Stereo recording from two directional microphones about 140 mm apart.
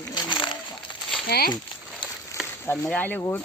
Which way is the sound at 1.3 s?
90° left.